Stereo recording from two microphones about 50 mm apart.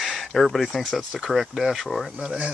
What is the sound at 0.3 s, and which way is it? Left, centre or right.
Speech, centre.